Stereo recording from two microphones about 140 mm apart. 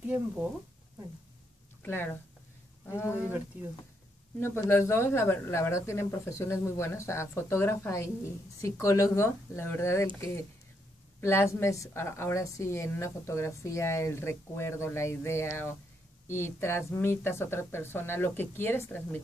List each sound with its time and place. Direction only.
0.0 s speech: 10° right (ahead or behind)
1.8 s a sound: 15° left (ahead or behind)
2.9 s a woman's voice: 20° left (ahead or behind)
4.4 s a woman's voice: 20° left (ahead or behind)